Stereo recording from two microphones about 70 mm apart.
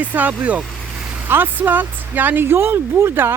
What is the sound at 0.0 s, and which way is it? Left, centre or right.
Speech, right.